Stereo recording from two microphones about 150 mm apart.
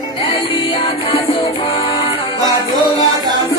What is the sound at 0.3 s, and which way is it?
Music, 35° left (ahead or behind).